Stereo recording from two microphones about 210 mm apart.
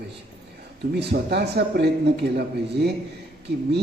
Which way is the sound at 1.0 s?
50° right (ahead or behind).